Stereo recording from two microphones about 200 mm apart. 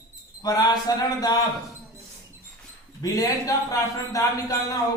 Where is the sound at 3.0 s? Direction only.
15° left (ahead or behind).